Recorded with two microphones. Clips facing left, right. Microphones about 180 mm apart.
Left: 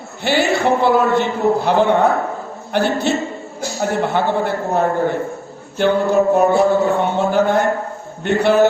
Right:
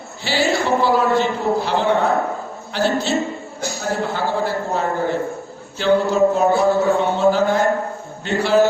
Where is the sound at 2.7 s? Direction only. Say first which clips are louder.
Left 2 dB; 60° left (ahead or behind).